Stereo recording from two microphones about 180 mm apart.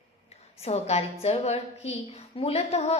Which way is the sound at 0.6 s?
35° left (ahead or behind).